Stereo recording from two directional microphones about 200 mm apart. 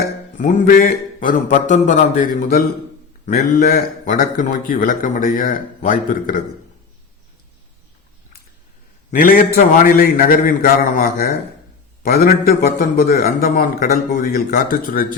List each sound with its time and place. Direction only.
0.3 s a man's voice: 45° left (ahead or behind)
9.6 s speech: 40° left (ahead or behind)